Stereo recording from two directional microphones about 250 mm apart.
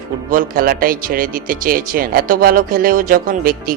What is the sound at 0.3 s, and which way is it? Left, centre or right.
Speech, right.